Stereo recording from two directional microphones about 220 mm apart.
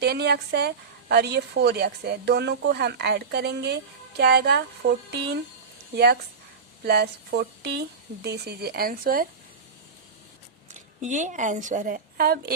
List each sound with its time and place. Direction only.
0.0 s a woman's voice: 45° right (ahead or behind)
6.8 s a woman's voice: 45° right (ahead or behind)
11.0 s a woman's voice: 35° right (ahead or behind)